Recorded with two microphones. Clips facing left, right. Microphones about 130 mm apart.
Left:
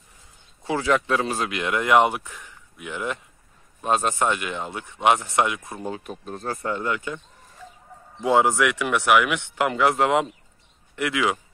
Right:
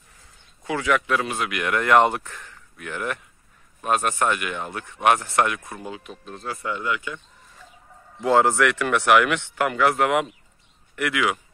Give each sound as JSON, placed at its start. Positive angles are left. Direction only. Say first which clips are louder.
{"t": 0.7, "sound": "speech", "louder": "left 1 dB", "side_deg": 30}
{"t": 5.9, "sound": "speech", "louder": "left 6 dB", "side_deg": 40}
{"t": 8.2, "sound": "speech", "louder": "right 1 dB", "side_deg": 15}